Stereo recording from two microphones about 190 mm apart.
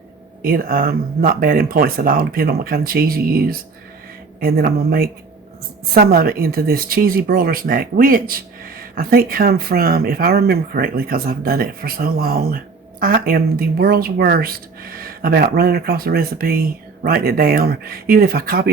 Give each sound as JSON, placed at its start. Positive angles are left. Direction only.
{"t": 0.4, "sound": "speech", "side_deg": -50}